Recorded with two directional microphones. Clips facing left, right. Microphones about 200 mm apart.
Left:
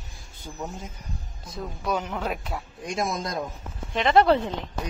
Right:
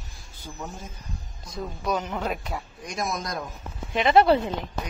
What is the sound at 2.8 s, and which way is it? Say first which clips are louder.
Speech: left 3 dB; 25° left (ahead or behind).